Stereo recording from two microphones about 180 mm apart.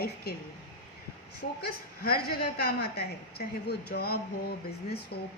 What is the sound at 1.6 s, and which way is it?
A woman's voice, 55° left (ahead or behind).